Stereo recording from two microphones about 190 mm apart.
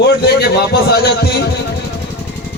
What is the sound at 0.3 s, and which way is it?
Speech, 60° left (ahead or behind).